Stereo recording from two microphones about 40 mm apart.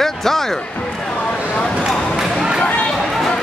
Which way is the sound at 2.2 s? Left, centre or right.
Centre.